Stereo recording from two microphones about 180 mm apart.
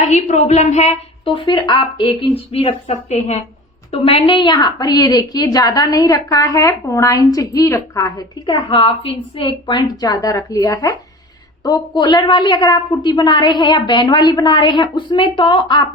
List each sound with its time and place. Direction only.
0.0 s a woman's voice: 40° left (ahead or behind)